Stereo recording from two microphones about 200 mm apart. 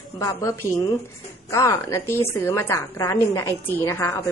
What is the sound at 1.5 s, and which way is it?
A woman's voice, 15° left (ahead or behind).